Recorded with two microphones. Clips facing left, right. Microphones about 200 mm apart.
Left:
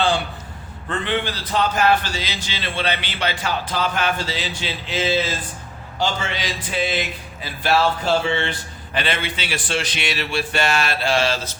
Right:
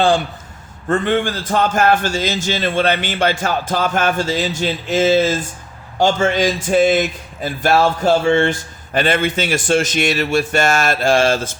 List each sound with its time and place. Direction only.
0.9 s a man's voice: 45° right (ahead or behind)